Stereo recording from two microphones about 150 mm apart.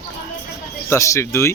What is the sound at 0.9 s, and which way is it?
Speech, 20° left (ahead or behind).